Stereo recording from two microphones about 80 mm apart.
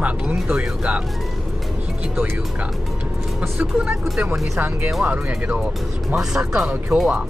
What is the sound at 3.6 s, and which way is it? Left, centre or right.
Speech, centre.